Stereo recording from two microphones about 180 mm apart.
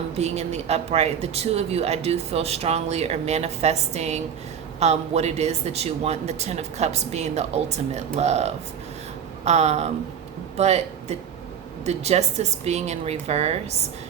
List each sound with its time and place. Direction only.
0.2 s speech: 35° right (ahead or behind)